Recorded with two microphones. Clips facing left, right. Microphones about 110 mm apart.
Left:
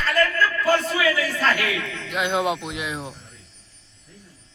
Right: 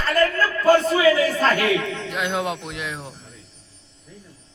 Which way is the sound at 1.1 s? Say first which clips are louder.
Right 5 dB; 45° right (ahead or behind).